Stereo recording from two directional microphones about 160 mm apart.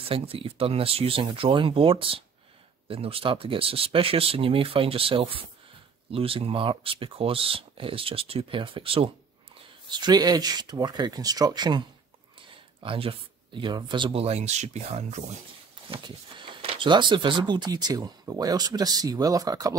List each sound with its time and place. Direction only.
0.0 s speech: 35° right (ahead or behind)
15.9 s speech: 30° right (ahead or behind)